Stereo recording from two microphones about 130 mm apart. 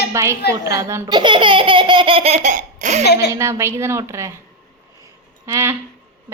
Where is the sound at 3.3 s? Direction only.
20° right (ahead or behind).